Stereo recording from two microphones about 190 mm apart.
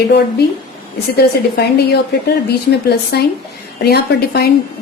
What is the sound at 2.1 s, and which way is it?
A woman's voice, 65° left (ahead or behind).